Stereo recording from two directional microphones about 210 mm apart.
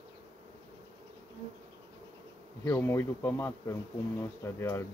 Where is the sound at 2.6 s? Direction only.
10° left (ahead or behind).